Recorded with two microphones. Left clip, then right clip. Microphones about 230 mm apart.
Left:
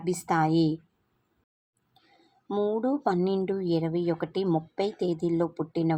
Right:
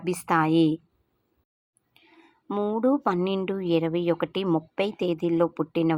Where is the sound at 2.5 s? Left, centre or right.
Right.